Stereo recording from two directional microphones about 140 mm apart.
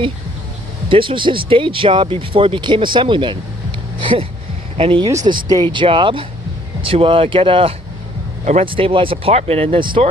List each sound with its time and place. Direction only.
0.9 s speech: 35° right (ahead or behind)